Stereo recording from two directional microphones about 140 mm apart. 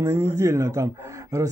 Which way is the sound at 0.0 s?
20° right (ahead or behind).